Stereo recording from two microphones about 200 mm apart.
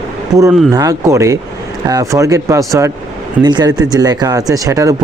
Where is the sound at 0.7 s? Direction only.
20° right (ahead or behind).